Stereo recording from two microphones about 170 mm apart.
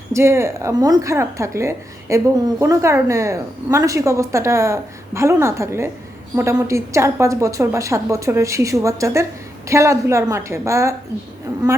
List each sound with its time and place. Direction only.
0.1 s a woman's voice: 15° right (ahead or behind)